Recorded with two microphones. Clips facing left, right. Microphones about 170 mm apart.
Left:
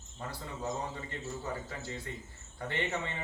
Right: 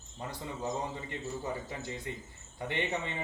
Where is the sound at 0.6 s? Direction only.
20° right (ahead or behind).